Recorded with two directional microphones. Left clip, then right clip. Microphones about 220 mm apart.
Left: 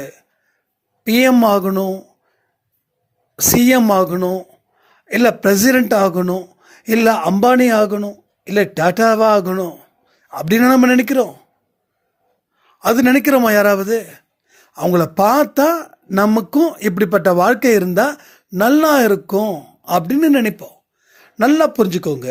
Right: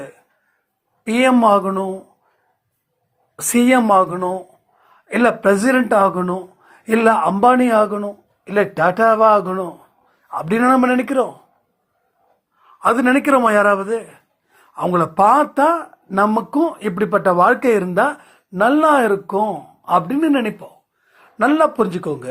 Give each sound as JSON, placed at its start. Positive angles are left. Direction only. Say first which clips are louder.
{"t": 1.0, "sound": "a man's voice", "louder": "left 1 dB", "side_deg": 50}
{"t": 3.6, "sound": "a man's voice", "louder": "right 1 dB", "side_deg": 50}
{"t": 12.6, "sound": "a man's voice", "louder": "left 1 dB", "side_deg": 50}